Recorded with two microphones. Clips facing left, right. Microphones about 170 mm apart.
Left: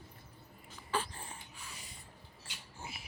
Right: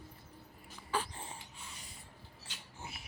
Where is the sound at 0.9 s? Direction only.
10° right (ahead or behind).